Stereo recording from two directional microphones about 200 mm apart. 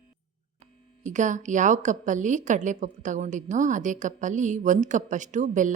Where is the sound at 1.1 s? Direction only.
40° right (ahead or behind).